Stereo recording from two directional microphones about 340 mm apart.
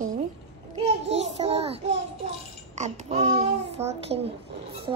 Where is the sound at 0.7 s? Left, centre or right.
Centre.